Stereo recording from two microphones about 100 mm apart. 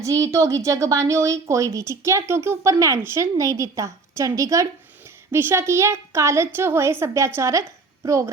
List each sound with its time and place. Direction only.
0.0 s a woman's voice: 30° right (ahead or behind)